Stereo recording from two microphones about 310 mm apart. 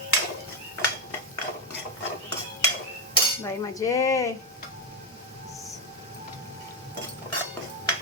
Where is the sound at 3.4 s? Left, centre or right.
Centre.